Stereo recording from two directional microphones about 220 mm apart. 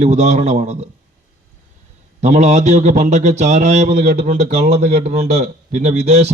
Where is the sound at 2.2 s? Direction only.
30° right (ahead or behind).